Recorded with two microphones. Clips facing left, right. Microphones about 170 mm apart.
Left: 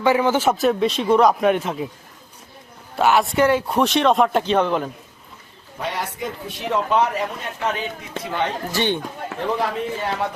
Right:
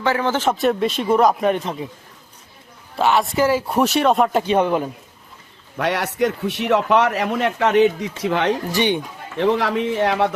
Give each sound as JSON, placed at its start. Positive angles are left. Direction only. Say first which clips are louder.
{"t": 0.0, "sound": "a man's voice", "louder": "left 2 dB", "side_deg": 15}
{"t": 2.9, "sound": "a man's voice", "louder": "even", "side_deg": 0}
{"t": 5.7, "sound": "a man's voice", "louder": "right 5 dB", "side_deg": -70}
{"t": 8.7, "sound": "speech", "louder": "even", "side_deg": -15}
{"t": 9.4, "sound": "a man's voice", "louder": "right 5 dB", "side_deg": -85}